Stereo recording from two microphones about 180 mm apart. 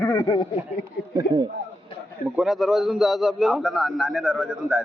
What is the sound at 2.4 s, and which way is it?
A man's voice, centre (ahead or behind).